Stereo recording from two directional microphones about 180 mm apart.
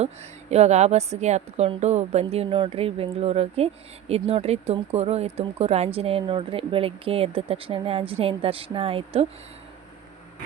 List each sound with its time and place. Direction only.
0.5 s speech: 40° right (ahead or behind)